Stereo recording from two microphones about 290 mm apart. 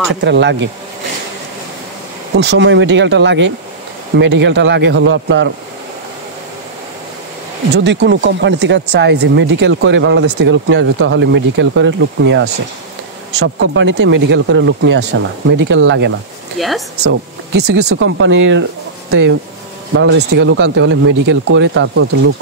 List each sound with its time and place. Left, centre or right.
0.1 s speech: right
2.3 s speech: right
7.7 s speech: right
16.5 s speech: centre
17.0 s speech: right